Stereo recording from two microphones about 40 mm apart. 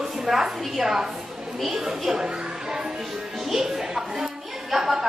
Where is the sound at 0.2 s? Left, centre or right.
Centre.